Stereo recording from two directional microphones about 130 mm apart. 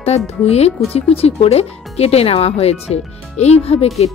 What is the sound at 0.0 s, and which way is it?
Speech, 55° left (ahead or behind).